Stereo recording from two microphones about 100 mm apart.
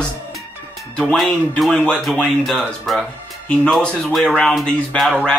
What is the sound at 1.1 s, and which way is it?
A man's voice, 5° left (ahead or behind).